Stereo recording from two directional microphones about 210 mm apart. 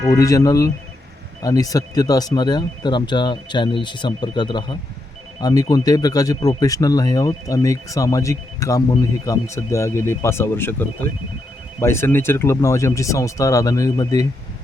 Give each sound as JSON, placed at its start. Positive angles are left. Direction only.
{"t": 0.1, "sound": "speech", "side_deg": 15}